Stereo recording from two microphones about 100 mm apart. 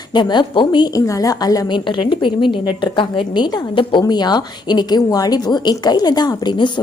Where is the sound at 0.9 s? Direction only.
35° left (ahead or behind).